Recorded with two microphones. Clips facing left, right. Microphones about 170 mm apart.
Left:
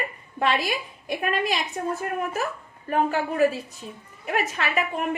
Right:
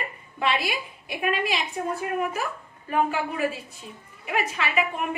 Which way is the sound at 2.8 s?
40° left (ahead or behind).